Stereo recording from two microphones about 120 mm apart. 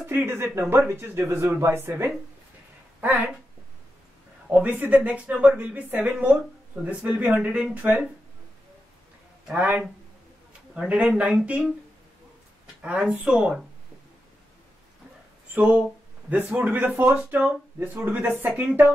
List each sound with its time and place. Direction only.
0.0 s speech: 20° right (ahead or behind)
4.5 s a woman's voice: 15° right (ahead or behind)
9.5 s a woman's voice: 10° right (ahead or behind)
12.8 s a woman's voice: 10° right (ahead or behind)
15.5 s a woman's voice: 15° right (ahead or behind)